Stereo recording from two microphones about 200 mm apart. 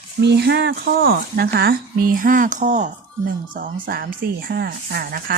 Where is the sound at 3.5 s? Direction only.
50° right (ahead or behind).